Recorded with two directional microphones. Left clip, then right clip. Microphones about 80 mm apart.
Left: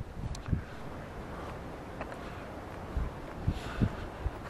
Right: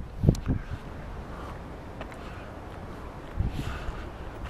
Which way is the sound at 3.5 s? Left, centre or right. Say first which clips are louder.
Left 3 dB; centre.